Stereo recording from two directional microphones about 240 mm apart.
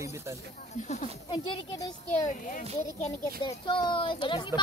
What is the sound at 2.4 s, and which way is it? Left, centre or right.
Speech, left.